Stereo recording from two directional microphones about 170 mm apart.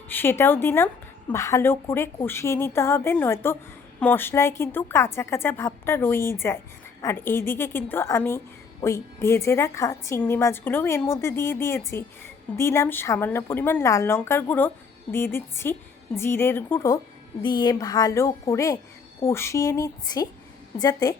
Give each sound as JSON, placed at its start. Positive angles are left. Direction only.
{"t": 0.1, "sound": "a woman's voice", "side_deg": 10}